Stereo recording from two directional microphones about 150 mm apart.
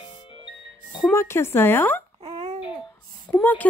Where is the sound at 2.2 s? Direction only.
45° right (ahead or behind).